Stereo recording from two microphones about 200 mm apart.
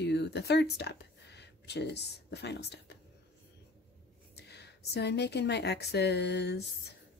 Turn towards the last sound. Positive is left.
turn(degrees=55)  # may be behind; listen again after turning